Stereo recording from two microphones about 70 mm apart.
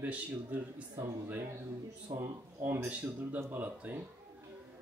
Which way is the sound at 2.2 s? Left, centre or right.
Right.